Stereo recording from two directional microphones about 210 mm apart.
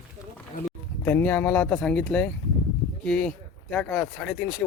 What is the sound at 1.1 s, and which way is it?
Speech, 10° left (ahead or behind).